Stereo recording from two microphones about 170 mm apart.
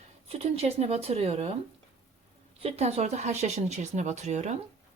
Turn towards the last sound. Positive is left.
turn(degrees=-40)  # may be behind; listen again after turning